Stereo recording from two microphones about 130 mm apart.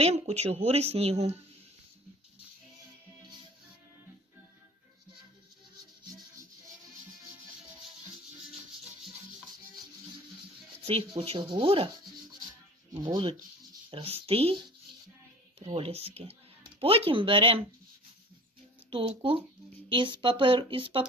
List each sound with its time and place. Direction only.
0.0 s speech: 55° right (ahead or behind)
10.8 s speech: 45° right (ahead or behind)
12.9 s speech: 35° right (ahead or behind)
13.9 s speech: 45° right (ahead or behind)
15.7 s speech: 50° right (ahead or behind)
18.9 s speech: 40° right (ahead or behind)